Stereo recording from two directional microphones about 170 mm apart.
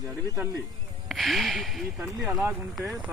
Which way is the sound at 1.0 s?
Centre (ahead or behind).